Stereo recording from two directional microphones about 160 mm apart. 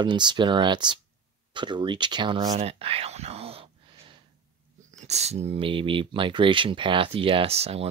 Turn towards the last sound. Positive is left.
turn(degrees=-40)  # may be behind; listen again after turning